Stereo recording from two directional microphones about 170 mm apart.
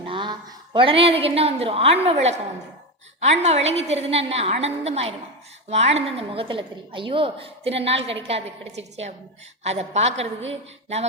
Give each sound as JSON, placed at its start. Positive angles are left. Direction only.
{"t": 0.1, "sound": "a woman's voice", "side_deg": -25}